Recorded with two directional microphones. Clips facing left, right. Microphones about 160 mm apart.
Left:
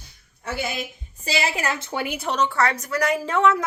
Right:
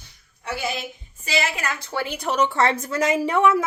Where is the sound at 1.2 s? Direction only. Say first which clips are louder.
Left 1 dB; 35° left (ahead or behind); by 2.1 s 15° left (ahead or behind).